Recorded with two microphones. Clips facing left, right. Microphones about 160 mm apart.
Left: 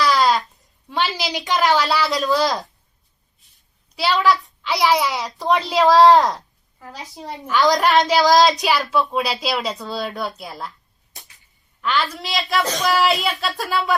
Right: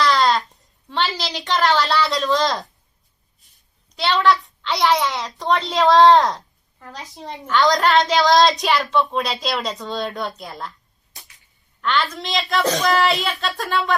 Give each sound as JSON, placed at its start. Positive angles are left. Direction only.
{"t": 0.0, "sound": "a sound", "side_deg": 5}
{"t": 1.4, "sound": "a woman's voice", "side_deg": 10}
{"t": 3.8, "sound": "a child's voice", "side_deg": 5}
{"t": 11.8, "sound": "a woman's voice", "side_deg": 0}